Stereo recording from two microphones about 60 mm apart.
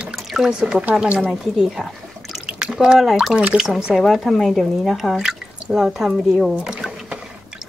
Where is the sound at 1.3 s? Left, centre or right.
Centre.